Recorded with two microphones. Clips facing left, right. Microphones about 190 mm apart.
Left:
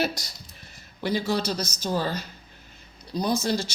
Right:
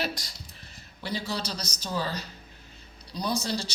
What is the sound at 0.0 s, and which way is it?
A woman's voice, 45° left (ahead or behind).